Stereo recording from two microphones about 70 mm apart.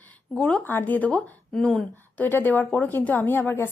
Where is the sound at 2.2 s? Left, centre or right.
Left.